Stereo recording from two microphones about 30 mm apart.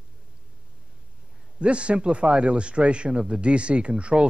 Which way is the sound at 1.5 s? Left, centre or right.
Right.